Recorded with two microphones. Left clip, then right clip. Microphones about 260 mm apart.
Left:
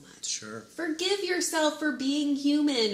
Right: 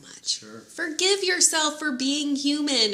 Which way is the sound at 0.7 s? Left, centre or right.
Right.